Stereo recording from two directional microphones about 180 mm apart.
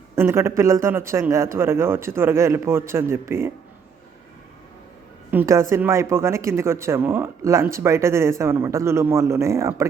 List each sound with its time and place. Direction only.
0.2 s speech: 15° right (ahead or behind)
5.3 s speech: 15° right (ahead or behind)